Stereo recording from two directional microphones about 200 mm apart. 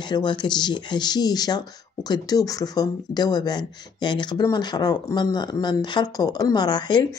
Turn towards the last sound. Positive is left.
turn(degrees=20)  # may be behind; listen again after turning